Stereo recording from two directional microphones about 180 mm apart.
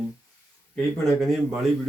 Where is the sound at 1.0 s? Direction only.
Centre (ahead or behind).